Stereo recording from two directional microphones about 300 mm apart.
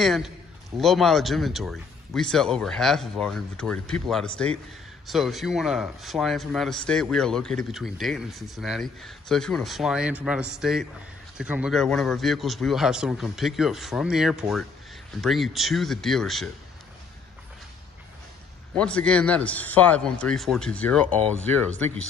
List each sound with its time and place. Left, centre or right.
0.0 s speech: centre
18.8 s speech: centre